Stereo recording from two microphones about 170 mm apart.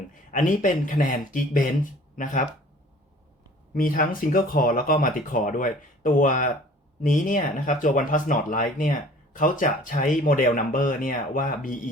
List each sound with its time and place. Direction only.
0.3 s speech: 50° left (ahead or behind)
3.8 s speech: 55° left (ahead or behind)